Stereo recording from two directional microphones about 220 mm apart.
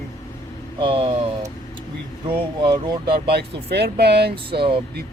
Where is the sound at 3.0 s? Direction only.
45° right (ahead or behind).